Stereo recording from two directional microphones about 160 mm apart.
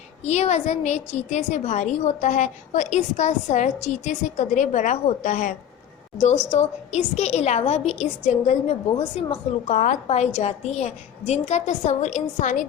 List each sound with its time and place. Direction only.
0.3 s a woman's voice: 45° left (ahead or behind)
9.7 s a woman's voice: 50° left (ahead or behind)